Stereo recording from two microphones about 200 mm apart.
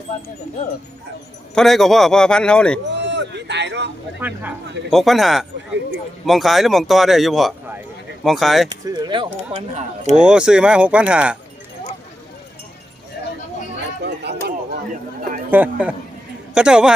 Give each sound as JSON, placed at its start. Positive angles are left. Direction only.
{"t": 1.5, "sound": "speech", "side_deg": 0}
{"t": 2.9, "sound": "a man's voice", "side_deg": -60}
{"t": 4.2, "sound": "a man's voice", "side_deg": -10}
{"t": 8.7, "sound": "speech", "side_deg": -20}
{"t": 10.2, "sound": "speech", "side_deg": -5}
{"t": 14.3, "sound": "a sound", "side_deg": -55}
{"t": 15.4, "sound": "a man's voice", "side_deg": -10}